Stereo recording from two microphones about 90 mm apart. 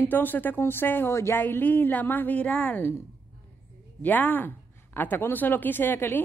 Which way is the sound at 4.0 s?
20° left (ahead or behind).